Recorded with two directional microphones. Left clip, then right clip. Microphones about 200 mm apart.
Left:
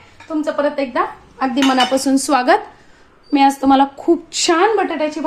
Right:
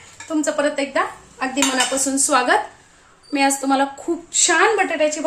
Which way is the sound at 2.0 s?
40° left (ahead or behind).